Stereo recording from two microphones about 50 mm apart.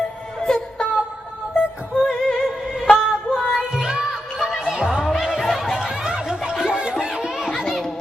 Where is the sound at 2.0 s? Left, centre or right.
Centre.